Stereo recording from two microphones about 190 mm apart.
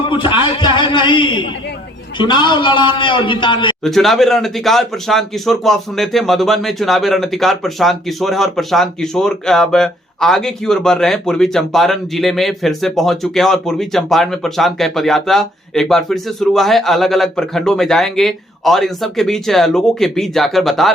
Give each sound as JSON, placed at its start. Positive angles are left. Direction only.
{"t": 0.0, "sound": "a man's voice", "side_deg": 25}
{"t": 3.8, "sound": "speech", "side_deg": 0}